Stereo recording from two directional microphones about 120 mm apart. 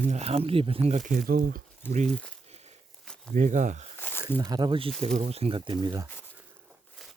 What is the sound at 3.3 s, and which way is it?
Speech, 90° right.